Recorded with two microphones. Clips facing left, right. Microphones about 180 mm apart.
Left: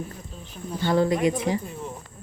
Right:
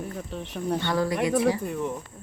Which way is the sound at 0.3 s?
75° right (ahead or behind).